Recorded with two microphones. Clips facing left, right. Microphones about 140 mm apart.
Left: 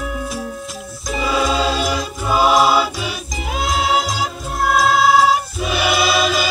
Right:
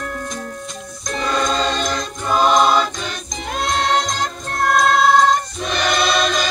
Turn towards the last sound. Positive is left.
turn(degrees=5)  # may be behind; listen again after turning